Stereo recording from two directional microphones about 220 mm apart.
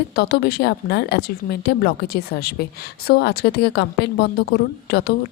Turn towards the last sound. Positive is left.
turn(degrees=45)  # may be behind; listen again after turning